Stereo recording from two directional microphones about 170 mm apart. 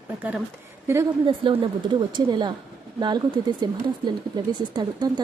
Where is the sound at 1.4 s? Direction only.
30° right (ahead or behind).